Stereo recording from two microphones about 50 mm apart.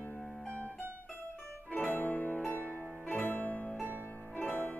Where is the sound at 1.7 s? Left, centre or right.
Left.